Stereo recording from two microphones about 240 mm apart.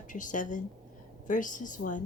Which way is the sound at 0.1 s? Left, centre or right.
Left.